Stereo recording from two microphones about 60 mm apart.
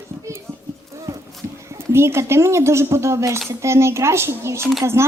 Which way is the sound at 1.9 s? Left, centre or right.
Right.